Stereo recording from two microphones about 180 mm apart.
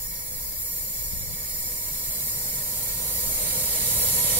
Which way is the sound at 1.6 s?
10° left (ahead or behind).